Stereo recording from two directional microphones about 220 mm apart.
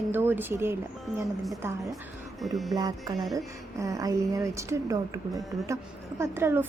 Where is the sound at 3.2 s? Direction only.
Centre (ahead or behind).